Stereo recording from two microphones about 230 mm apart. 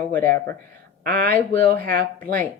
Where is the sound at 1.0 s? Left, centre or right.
Right.